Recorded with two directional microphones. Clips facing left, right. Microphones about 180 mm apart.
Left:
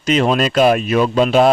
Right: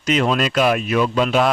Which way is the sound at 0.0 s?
30° left (ahead or behind).